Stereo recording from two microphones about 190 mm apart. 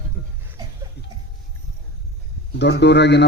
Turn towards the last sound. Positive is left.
turn(degrees=65)  # may be behind; listen again after turning